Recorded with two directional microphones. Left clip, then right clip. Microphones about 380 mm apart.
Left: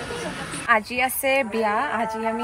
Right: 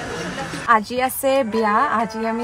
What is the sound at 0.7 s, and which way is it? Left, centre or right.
A woman's voice, right.